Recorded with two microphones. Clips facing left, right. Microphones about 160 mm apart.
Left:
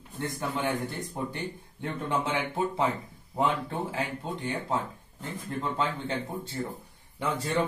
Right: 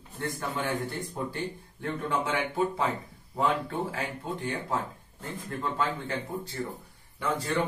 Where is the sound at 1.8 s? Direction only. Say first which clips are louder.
Even; 20° left (ahead or behind).